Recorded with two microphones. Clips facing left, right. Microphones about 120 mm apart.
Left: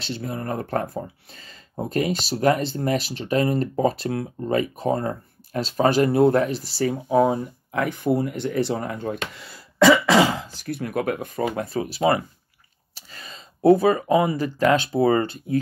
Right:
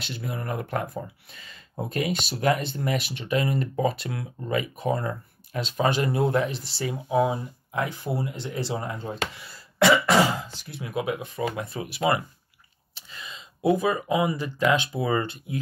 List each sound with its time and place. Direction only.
0.0 s speech: 35° left (ahead or behind); by 9.4 s 60° left (ahead or behind)
10.0 s throat clearing: 90° left
10.6 s speech: 50° left (ahead or behind)